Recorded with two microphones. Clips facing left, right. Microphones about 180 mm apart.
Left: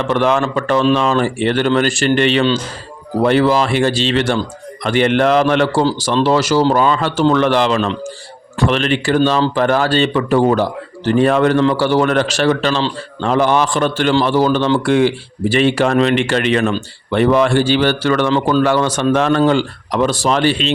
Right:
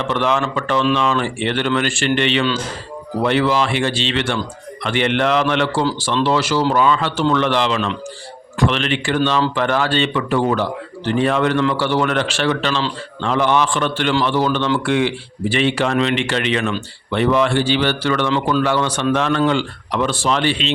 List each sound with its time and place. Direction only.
0.1 s speech: 45° left (ahead or behind)